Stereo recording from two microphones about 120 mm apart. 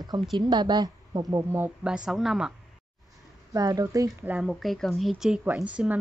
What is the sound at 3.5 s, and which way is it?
Speech, 30° right (ahead or behind).